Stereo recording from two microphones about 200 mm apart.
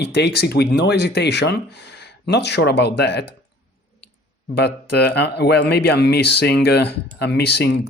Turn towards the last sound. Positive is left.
turn(degrees=55)  # may be behind; listen again after turning